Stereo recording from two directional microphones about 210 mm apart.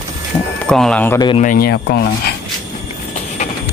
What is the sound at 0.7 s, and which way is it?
Speech, 5° left (ahead or behind).